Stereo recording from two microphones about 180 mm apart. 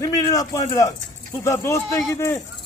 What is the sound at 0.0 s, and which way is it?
A man's voice, 20° left (ahead or behind).